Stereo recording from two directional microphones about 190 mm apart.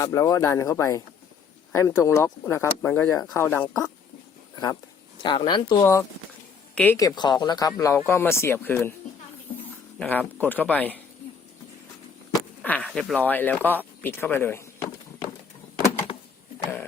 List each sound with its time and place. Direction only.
0.0 s speech: 15° left (ahead or behind)
5.2 s speech: 25° left (ahead or behind)
10.0 s speech: 10° left (ahead or behind)
12.3 s speech: 10° left (ahead or behind)